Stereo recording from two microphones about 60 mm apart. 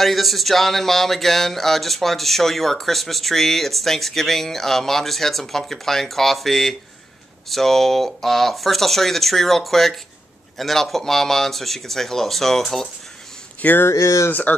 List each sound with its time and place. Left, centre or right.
0.0 s speech: centre
13.6 s speech: left
13.8 s speech: left